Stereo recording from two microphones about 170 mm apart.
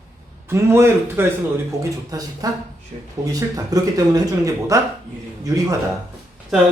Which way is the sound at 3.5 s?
20° right (ahead or behind).